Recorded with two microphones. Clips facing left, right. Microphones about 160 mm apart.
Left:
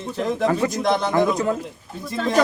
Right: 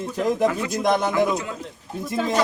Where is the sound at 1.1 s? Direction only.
45° left (ahead or behind).